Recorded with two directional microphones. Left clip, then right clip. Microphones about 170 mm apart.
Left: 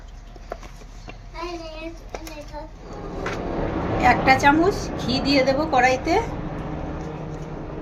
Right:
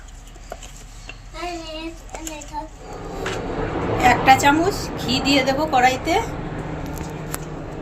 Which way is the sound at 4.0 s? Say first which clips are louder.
Right 3 dB; 15° left (ahead or behind).